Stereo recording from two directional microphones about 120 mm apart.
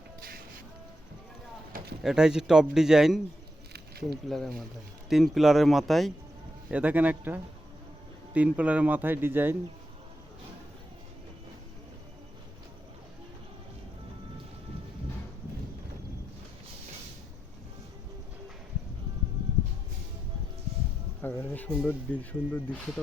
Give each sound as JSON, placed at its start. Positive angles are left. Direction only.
{"t": 2.0, "sound": "speech", "side_deg": -5}
{"t": 4.3, "sound": "speech", "side_deg": 5}
{"t": 6.7, "sound": "speech", "side_deg": -15}
{"t": 21.2, "sound": "insect", "side_deg": 15}
{"t": 21.8, "sound": "speech", "side_deg": 10}